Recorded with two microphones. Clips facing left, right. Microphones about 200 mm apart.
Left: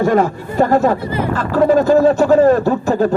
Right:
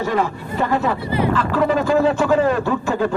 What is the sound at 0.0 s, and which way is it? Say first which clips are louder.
Speech: left 6 dB; 50° left (ahead or behind).